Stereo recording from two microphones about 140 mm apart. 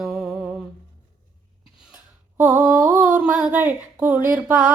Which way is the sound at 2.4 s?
10° right (ahead or behind).